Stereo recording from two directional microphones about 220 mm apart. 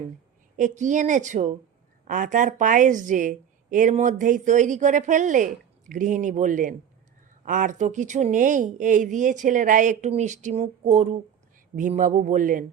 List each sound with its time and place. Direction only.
0.5 s a woman's voice: 35° right (ahead or behind)